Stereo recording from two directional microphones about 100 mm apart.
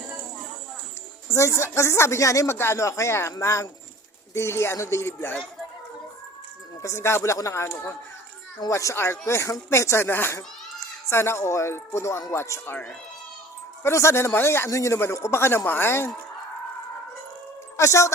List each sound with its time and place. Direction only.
1.3 s speech: 30° left (ahead or behind)
6.8 s speech: 25° left (ahead or behind)
13.8 s speech: 25° left (ahead or behind)
17.7 s a woman's voice: 30° left (ahead or behind)